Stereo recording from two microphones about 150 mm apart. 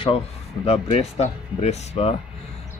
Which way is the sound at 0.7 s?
40° left (ahead or behind).